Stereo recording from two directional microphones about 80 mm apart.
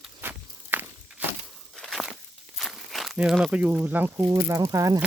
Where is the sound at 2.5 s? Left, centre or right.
Centre.